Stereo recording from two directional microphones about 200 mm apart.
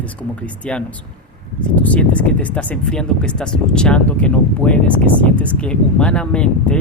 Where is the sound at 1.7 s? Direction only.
5° left (ahead or behind).